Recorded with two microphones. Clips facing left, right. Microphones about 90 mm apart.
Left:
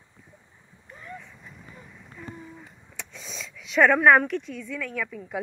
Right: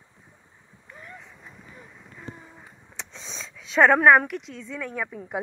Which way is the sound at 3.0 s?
25° right (ahead or behind).